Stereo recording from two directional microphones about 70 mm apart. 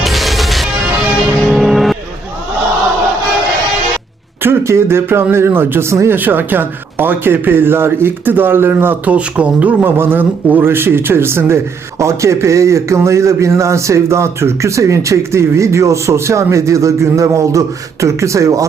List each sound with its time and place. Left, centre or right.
0.0 s music: centre
4.4 s speech: right
5.9 s speech: right
6.1 s speech: right
9.1 s speech: centre
9.8 s speech: right